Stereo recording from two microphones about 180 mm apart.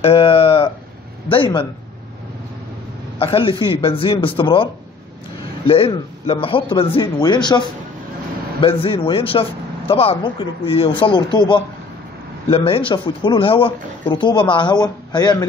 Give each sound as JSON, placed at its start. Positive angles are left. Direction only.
{"t": 0.0, "sound": "a sound", "side_deg": 30}
{"t": 1.3, "sound": "a man's voice", "side_deg": 30}
{"t": 3.2, "sound": "a man's voice", "side_deg": 30}
{"t": 5.7, "sound": "a man's voice", "side_deg": 30}